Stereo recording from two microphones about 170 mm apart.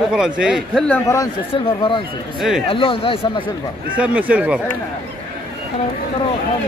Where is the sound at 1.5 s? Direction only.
30° left (ahead or behind).